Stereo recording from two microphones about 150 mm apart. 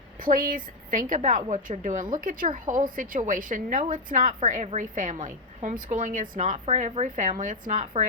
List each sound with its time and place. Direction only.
0.2 s speech: 65° right (ahead or behind)
4.4 s speech: 55° right (ahead or behind)